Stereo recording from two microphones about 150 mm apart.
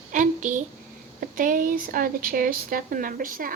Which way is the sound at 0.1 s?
60° right (ahead or behind).